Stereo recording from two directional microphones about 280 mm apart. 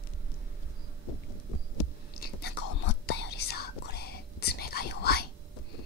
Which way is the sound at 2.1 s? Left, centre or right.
Left.